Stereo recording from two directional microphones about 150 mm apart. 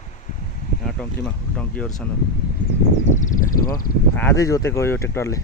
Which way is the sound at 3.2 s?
60° left (ahead or behind).